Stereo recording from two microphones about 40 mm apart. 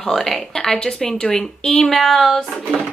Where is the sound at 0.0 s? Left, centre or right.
Centre.